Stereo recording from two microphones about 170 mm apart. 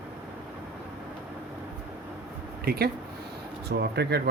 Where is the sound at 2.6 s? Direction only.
65° right (ahead or behind).